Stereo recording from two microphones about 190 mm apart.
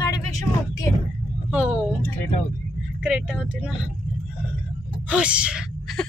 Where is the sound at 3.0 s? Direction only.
5° right (ahead or behind).